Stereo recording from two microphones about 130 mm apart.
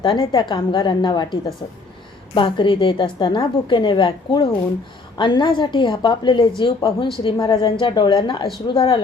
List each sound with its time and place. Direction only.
0.0 s a woman's voice: 40° left (ahead or behind)